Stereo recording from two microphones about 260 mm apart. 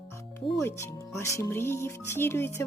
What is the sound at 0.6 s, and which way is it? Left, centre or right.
Speech, centre.